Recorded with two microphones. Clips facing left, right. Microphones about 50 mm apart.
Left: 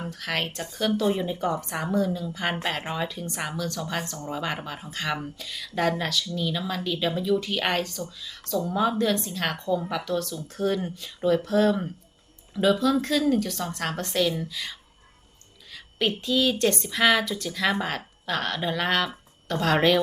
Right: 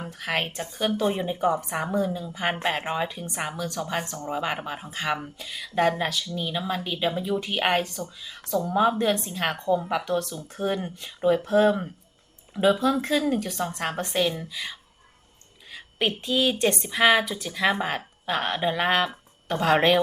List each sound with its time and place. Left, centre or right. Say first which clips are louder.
0.0 s a woman's voice: right 1 dB; centre